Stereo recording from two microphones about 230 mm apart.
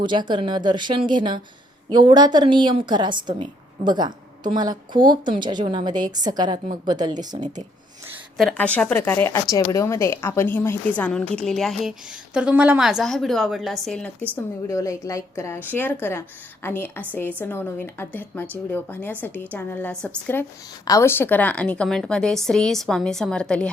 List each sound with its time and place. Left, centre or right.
0.0 s a woman's voice: centre
8.4 s speech: centre